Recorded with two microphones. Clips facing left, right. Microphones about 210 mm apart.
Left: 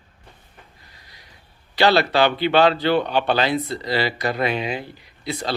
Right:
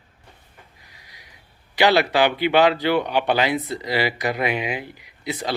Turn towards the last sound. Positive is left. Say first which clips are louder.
# even
turn(degrees=-15)  # may be behind; listen again after turning